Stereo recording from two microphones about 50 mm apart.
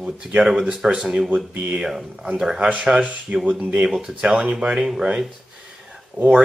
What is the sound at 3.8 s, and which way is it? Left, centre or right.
Speech, centre.